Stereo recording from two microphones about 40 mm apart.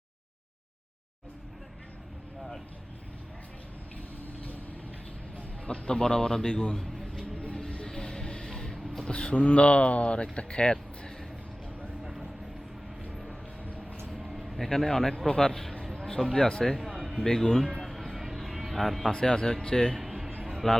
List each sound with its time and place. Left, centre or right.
5.4 s a man's voice: left
7.3 s vehicle: left
7.9 s a sound: centre
9.0 s speech: left
12.0 s vehicle: centre
14.1 s a sound: centre
15.3 s speech: centre
16.6 s speech: centre
17.8 s a sound: centre
19.1 s speech: centre
19.9 s music: centre